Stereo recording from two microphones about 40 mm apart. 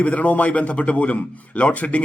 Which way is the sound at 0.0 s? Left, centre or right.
Left.